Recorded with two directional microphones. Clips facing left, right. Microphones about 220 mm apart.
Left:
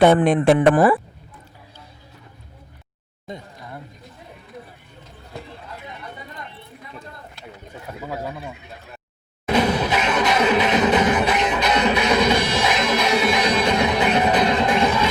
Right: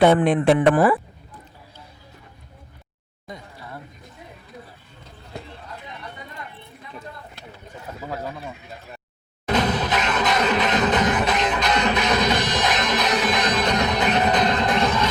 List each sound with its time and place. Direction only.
0.2 s speech: 45° left (ahead or behind)
8.1 s a sound: 10° left (ahead or behind)
9.5 s music: 10° left (ahead or behind)